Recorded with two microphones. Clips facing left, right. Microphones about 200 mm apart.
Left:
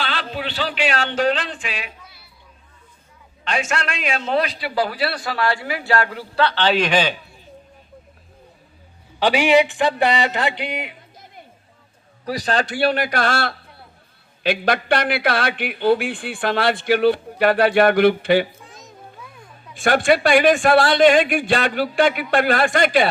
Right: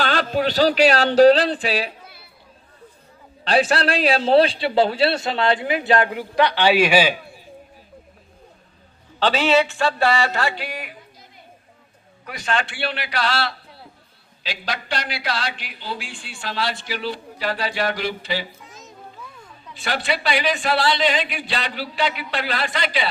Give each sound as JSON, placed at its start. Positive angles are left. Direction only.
{"t": 0.0, "sound": "speech", "side_deg": -45}
{"t": 2.0, "sound": "chatter", "side_deg": -55}
{"t": 3.4, "sound": "a man's voice", "side_deg": -35}
{"t": 9.1, "sound": "speech", "side_deg": 15}
{"t": 12.2, "sound": "speech", "side_deg": 35}
{"t": 19.7, "sound": "speech", "side_deg": 50}